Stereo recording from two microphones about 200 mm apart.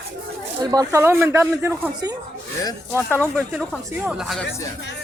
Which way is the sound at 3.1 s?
5° left (ahead or behind).